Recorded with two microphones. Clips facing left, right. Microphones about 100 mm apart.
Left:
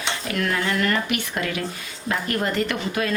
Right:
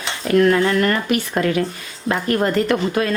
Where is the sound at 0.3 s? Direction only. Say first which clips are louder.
Right 10 dB; 40° right (ahead or behind).